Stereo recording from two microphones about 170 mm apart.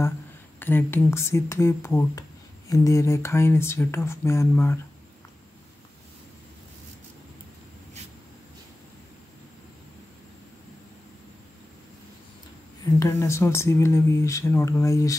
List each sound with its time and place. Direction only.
0.6 s speech: 10° left (ahead or behind)
13.0 s speech: 15° left (ahead or behind)